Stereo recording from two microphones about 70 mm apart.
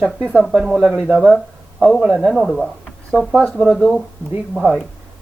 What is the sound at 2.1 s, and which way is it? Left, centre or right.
Speech, centre.